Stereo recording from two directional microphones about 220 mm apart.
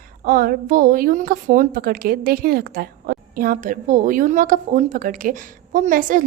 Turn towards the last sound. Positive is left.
turn(degrees=-35)  # may be behind; listen again after turning